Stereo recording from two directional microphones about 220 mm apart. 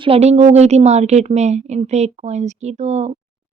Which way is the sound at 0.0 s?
30° right (ahead or behind).